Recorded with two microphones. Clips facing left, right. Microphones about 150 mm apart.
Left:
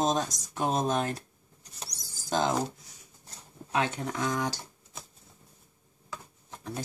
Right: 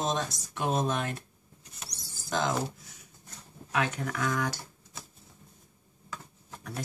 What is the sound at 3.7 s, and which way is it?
Speech, 30° left (ahead or behind).